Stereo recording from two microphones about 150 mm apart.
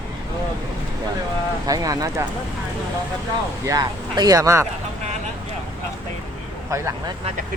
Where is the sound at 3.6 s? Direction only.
25° right (ahead or behind).